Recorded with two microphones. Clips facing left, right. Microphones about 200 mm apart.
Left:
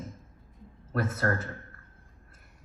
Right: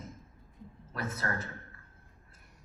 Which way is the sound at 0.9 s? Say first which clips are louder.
Left 7 dB; 50° left (ahead or behind).